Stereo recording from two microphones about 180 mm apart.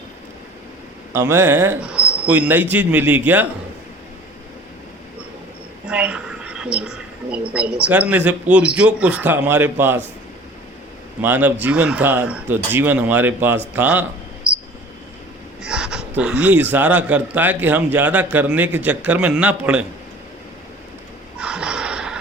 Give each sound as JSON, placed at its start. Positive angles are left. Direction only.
{"t": 1.1, "sound": "speech", "side_deg": -15}
{"t": 5.8, "sound": "speech", "side_deg": -5}
{"t": 11.2, "sound": "speech", "side_deg": -10}
{"t": 15.6, "sound": "speech", "side_deg": -5}
{"t": 21.3, "sound": "gasp", "side_deg": -5}